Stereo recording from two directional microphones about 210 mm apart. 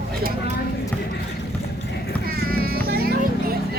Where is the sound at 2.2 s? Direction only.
45° right (ahead or behind).